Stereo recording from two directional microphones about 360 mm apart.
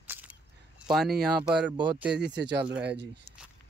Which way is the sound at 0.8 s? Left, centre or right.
Centre.